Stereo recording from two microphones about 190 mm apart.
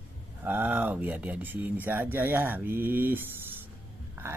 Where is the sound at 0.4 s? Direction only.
10° right (ahead or behind).